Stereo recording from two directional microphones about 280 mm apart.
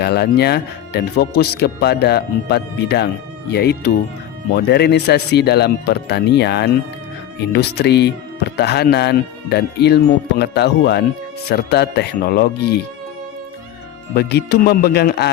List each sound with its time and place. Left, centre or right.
0.0 s speech: left
14.1 s speech: left